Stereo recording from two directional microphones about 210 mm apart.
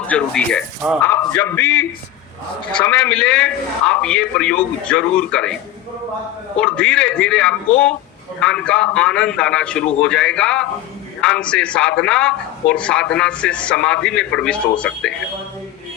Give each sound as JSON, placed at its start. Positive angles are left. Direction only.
{"t": 0.1, "sound": "a man's voice", "side_deg": 5}
{"t": 6.6, "sound": "speech", "side_deg": 5}